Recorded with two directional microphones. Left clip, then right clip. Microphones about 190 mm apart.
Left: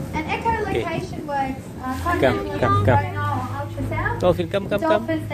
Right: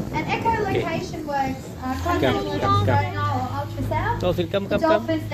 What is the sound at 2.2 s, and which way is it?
Speech, 15° left (ahead or behind).